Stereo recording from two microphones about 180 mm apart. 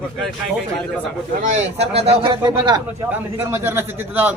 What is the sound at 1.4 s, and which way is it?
Speech, 40° right (ahead or behind).